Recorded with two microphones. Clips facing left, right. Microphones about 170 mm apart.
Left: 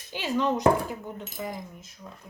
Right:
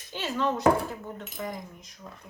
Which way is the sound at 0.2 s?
15° left (ahead or behind).